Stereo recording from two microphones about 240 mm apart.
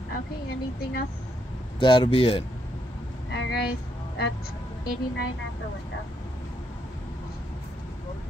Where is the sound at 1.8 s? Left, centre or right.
Centre.